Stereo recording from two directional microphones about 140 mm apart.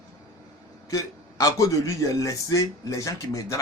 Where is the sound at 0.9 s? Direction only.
25° left (ahead or behind).